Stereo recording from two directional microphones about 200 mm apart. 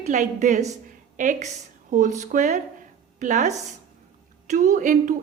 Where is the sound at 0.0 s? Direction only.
40° right (ahead or behind).